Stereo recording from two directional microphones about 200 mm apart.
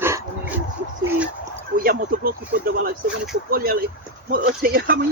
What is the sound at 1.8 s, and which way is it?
Speech, 45° right (ahead or behind).